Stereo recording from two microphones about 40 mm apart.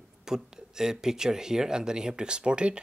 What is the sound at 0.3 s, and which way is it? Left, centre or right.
Speech, centre.